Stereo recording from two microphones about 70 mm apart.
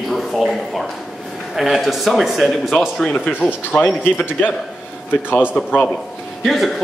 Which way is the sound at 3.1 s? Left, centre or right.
Left.